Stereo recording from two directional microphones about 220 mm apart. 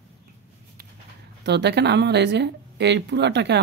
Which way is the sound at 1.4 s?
50° right (ahead or behind).